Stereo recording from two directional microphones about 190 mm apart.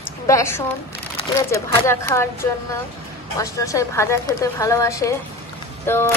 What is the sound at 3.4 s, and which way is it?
Speech, 15° left (ahead or behind).